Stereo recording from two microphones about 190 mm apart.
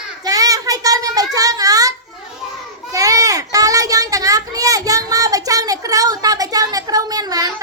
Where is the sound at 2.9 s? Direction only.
20° right (ahead or behind).